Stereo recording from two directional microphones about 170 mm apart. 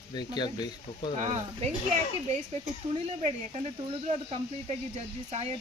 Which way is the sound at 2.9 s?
35° right (ahead or behind).